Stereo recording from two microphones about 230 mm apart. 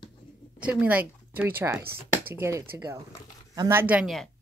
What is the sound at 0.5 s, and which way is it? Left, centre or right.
A woman's voice, centre.